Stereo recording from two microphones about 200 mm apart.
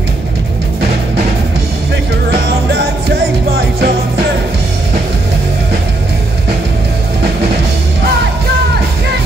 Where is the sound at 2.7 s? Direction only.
50° right (ahead or behind).